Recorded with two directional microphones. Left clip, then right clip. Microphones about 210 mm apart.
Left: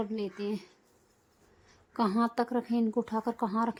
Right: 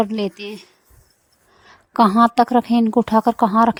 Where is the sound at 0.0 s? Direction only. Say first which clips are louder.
Right 13 dB; 40° right (ahead or behind).